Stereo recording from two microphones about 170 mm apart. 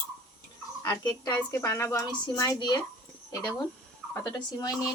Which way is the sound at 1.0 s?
25° left (ahead or behind).